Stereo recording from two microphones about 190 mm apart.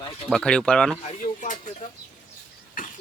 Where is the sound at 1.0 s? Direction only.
40° left (ahead or behind).